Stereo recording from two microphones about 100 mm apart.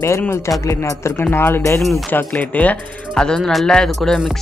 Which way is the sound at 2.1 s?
20° left (ahead or behind).